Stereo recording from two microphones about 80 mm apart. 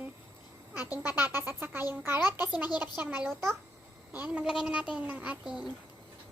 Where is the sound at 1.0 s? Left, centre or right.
Right.